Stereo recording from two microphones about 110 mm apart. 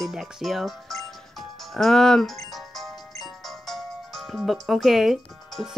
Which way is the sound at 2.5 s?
Centre (ahead or behind).